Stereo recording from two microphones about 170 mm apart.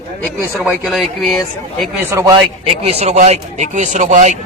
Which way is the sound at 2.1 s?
25° right (ahead or behind).